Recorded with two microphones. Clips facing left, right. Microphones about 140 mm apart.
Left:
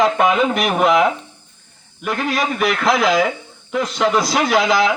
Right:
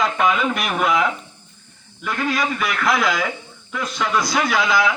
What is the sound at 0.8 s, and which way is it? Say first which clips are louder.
Speech: left 5 dB; 25° left (ahead or behind).